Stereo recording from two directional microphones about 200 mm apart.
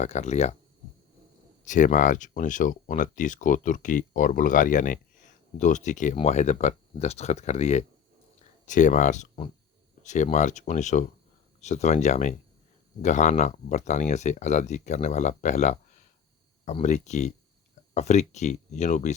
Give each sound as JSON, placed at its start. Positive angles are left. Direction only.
{"t": 0.0, "sound": "speech", "side_deg": 35}
{"t": 1.6, "sound": "speech", "side_deg": 40}